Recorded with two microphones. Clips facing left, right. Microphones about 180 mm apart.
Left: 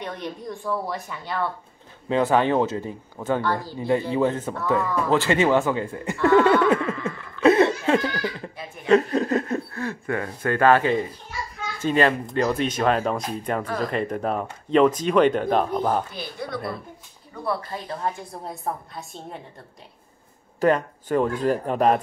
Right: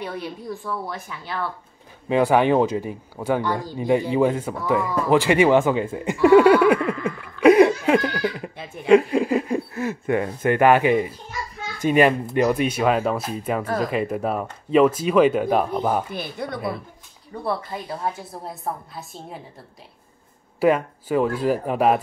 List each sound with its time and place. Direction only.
0.0 s a woman's voice: 5° right (ahead or behind)
2.0 s speech: 15° right (ahead or behind)
16.1 s speech: 55° right (ahead or behind)
17.8 s a woman's voice: 5° right (ahead or behind)
20.6 s speech: 10° right (ahead or behind)